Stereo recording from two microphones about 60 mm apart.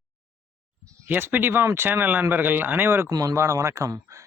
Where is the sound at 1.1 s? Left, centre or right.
Right.